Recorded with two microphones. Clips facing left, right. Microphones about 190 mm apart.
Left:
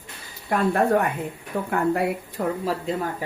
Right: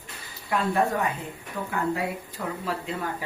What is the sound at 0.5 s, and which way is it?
A woman's voice, 55° left (ahead or behind).